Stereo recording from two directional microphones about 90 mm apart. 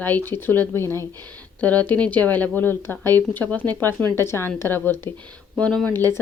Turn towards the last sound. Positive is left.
turn(degrees=20)  # may be behind; listen again after turning